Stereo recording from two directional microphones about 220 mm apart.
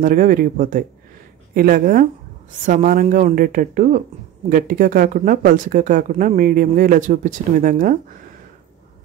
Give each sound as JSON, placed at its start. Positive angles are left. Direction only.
{"t": 0.0, "sound": "speech", "side_deg": -40}